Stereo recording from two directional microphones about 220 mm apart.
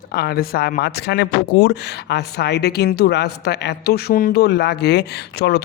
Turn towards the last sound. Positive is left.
turn(degrees=50)  # may be behind; listen again after turning